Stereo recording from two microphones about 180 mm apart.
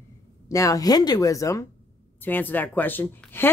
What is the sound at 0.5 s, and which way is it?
Speech, 20° left (ahead or behind).